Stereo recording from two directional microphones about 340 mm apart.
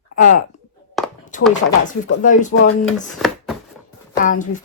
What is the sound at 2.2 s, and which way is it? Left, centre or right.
Speech, left.